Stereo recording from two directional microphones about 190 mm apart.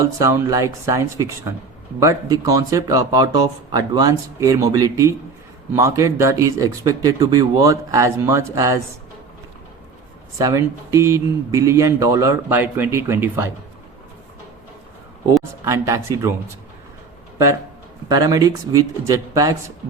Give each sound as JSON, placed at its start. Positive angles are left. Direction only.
{"t": 0.0, "sound": "speech", "side_deg": -15}
{"t": 10.3, "sound": "speech", "side_deg": -20}
{"t": 15.6, "sound": "speech", "side_deg": -15}
{"t": 17.3, "sound": "speech", "side_deg": -15}